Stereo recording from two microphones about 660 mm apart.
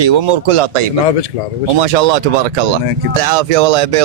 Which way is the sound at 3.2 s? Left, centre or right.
Right.